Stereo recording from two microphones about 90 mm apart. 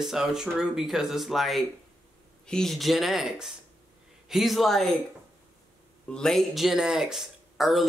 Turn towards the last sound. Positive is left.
turn(degrees=0)  # may be behind; listen again after turning